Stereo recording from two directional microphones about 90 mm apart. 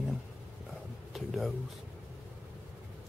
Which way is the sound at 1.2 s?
Centre (ahead or behind).